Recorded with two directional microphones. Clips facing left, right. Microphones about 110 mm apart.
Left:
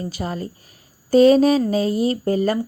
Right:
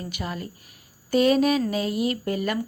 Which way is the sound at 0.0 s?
35° left (ahead or behind).